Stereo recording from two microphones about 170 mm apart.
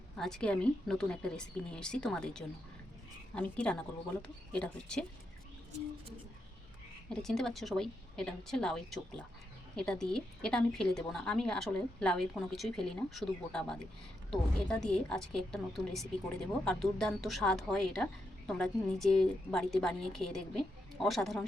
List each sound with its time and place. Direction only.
0.2 s a woman's voice: 5° left (ahead or behind)
7.1 s a woman's voice: 5° left (ahead or behind)